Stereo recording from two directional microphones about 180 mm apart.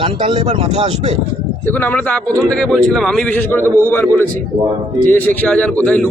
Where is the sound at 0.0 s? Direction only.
30° right (ahead or behind).